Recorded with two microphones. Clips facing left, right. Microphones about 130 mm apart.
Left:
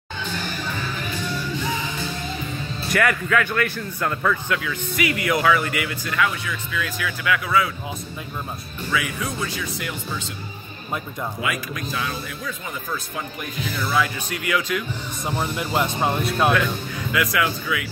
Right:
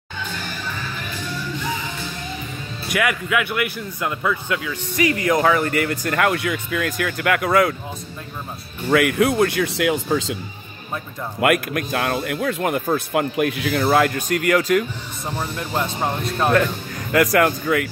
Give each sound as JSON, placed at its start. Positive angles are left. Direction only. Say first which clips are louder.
{"t": 2.9, "sound": "a man's voice", "louder": "left 1 dB", "side_deg": -5}
{"t": 4.9, "sound": "speech", "louder": "right 4 dB", "side_deg": -35}
{"t": 8.9, "sound": "speech", "louder": "right 10 dB", "side_deg": -65}
{"t": 11.4, "sound": "a man's voice", "louder": "right 13 dB", "side_deg": -60}
{"t": 13.8, "sound": "speech", "louder": "right 6 dB", "side_deg": -55}
{"t": 15.2, "sound": "speech", "louder": "left 1 dB", "side_deg": 10}
{"t": 17.1, "sound": "speech", "louder": "right 7 dB", "side_deg": -45}